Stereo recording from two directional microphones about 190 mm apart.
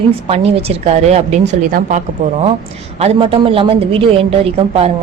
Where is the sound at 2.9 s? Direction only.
30° right (ahead or behind).